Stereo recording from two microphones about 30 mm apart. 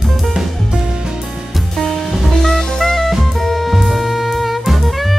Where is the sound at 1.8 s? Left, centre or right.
Centre.